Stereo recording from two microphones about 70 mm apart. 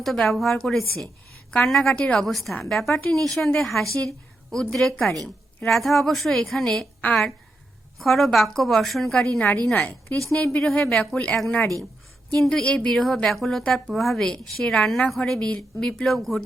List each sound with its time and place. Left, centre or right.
0.0 s a woman's voice: centre
2.2 s a woman's voice: centre
5.6 s a woman's voice: centre
7.9 s a woman's voice: centre
9.2 s a woman's voice: centre
12.4 s a woman's voice: centre
12.6 s speech: centre
12.9 s a woman's voice: centre
13.7 s speech: centre
13.9 s a woman's voice: centre